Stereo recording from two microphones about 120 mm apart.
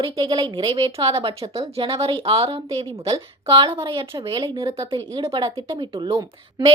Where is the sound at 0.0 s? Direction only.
40° right (ahead or behind).